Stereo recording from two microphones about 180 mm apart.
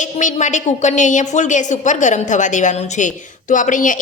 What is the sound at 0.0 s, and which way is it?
Speech, 45° left (ahead or behind).